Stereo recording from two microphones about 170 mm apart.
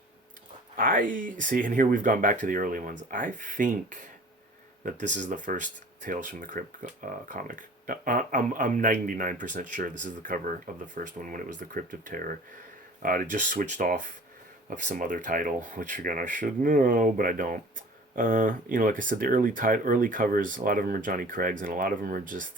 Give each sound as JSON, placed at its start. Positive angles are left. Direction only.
{"t": 0.8, "sound": "speech", "side_deg": -55}